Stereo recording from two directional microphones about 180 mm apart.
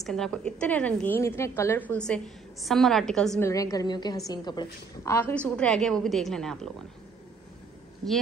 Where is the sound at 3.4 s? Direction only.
20° left (ahead or behind); by 6.7 s 5° left (ahead or behind).